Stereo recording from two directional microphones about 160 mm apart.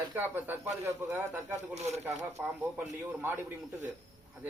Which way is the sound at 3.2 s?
15° right (ahead or behind).